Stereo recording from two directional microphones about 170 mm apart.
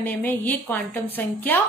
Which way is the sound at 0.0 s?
10° left (ahead or behind).